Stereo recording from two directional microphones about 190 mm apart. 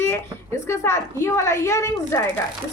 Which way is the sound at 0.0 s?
15° left (ahead or behind).